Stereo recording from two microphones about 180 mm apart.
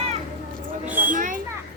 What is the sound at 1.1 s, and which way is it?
Children playing, 45° right (ahead or behind).